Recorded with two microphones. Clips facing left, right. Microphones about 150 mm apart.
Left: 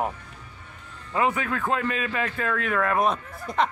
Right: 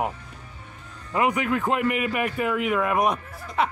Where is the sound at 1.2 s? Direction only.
15° right (ahead or behind).